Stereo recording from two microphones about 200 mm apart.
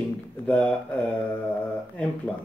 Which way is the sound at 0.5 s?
5° left (ahead or behind).